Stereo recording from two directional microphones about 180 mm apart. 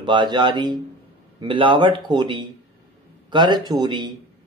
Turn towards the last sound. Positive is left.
turn(degrees=-25)  # may be behind; listen again after turning